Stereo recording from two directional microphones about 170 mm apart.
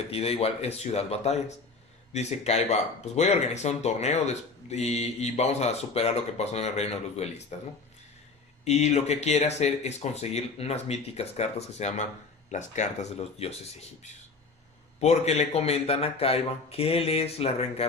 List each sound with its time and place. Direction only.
0.1 s speech: 35° left (ahead or behind)
8.6 s speech: 40° left (ahead or behind)